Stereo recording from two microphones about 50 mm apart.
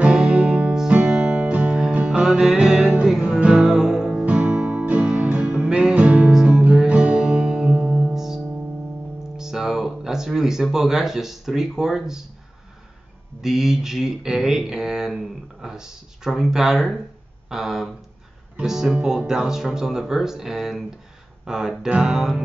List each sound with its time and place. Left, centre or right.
0.0 s music: centre
2.0 s music: centre
4.3 s music: right
4.6 s guitar: right
5.0 s music: centre
5.6 s music: centre
9.4 s speech: centre
13.4 s speech: centre
21.8 s music: right
22.1 s speech: centre